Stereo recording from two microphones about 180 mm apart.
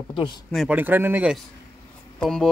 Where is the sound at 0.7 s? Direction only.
10° right (ahead or behind).